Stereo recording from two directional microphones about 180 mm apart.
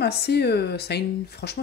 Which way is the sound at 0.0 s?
65° left (ahead or behind).